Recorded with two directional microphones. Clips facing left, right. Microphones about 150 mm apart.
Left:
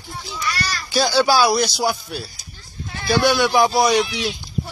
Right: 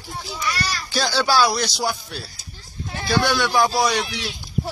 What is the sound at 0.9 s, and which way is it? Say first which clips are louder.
Speech: left 5 dB; 10° left (ahead or behind).